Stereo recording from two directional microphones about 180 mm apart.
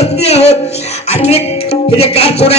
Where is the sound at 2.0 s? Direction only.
35° left (ahead or behind).